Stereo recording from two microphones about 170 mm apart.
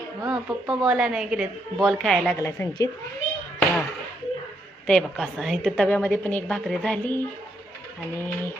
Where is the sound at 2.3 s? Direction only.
15° left (ahead or behind).